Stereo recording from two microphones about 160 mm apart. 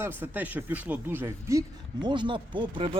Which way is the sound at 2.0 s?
30° right (ahead or behind).